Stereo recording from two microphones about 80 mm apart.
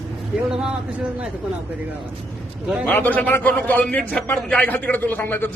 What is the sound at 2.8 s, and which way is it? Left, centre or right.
A man's voice, left.